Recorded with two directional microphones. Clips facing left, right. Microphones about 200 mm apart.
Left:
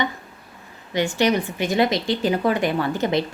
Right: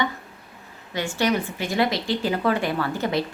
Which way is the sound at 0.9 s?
20° left (ahead or behind).